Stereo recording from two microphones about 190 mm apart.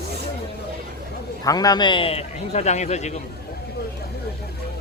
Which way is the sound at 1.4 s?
20° left (ahead or behind).